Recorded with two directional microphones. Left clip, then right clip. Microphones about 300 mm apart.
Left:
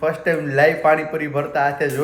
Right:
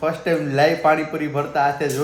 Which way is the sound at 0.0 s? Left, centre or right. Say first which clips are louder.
Left 1 dB; centre.